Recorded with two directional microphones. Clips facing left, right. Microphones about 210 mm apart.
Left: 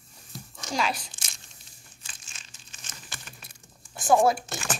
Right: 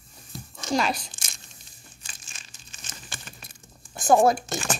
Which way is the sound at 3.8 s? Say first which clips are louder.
Right 2 dB; 40° right (ahead or behind).